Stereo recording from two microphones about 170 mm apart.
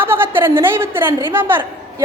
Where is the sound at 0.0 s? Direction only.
10° right (ahead or behind).